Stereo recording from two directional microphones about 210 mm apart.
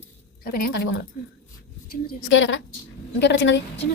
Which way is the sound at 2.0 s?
65° left (ahead or behind).